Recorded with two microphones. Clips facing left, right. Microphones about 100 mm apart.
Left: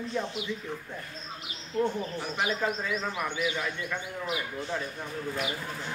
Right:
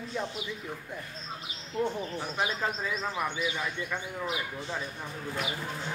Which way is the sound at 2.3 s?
25° right (ahead or behind).